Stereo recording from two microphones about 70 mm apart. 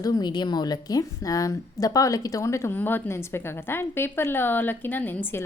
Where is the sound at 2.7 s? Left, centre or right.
Left.